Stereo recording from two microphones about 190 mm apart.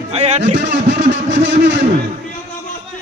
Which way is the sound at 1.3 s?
80° right.